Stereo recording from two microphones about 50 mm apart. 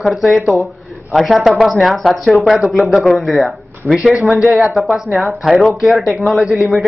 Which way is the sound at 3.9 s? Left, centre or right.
Centre.